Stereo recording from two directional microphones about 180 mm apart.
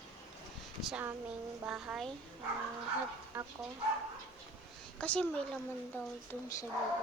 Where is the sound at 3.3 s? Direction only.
10° right (ahead or behind).